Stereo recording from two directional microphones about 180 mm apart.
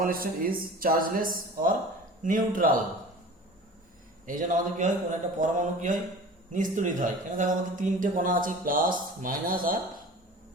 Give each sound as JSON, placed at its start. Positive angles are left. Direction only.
{"t": 0.0, "sound": "speech", "side_deg": -55}
{"t": 4.3, "sound": "speech", "side_deg": -45}